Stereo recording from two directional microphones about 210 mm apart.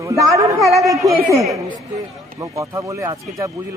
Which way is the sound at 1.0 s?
15° right (ahead or behind).